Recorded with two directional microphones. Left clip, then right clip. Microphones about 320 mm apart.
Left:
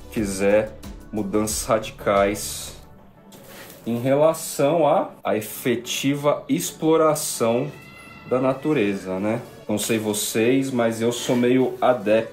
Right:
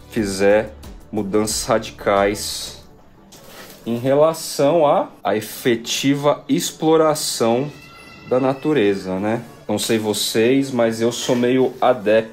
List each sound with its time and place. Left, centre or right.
0.1 s speech: right
3.8 s speech: right